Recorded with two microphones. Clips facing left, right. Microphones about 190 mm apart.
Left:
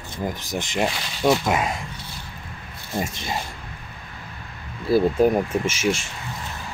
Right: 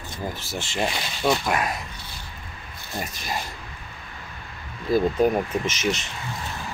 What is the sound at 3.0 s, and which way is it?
Speech, 25° left (ahead or behind).